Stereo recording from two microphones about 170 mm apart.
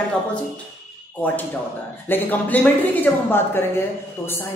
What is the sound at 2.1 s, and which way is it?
Speech, 10° left (ahead or behind).